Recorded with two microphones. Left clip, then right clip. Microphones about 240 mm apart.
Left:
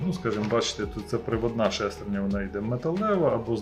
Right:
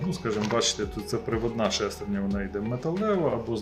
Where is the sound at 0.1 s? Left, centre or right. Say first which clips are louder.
Left 1 dB; centre.